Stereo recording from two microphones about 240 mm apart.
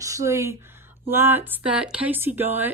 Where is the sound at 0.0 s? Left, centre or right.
Centre.